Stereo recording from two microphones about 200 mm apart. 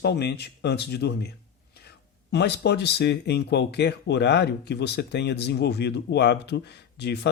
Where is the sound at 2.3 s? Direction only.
55° left (ahead or behind).